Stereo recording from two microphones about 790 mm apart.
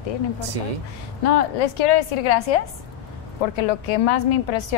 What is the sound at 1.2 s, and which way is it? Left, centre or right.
A woman's voice, left.